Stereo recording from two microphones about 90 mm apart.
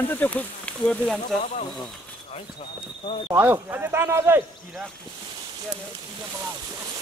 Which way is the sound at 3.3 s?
20° right (ahead or behind).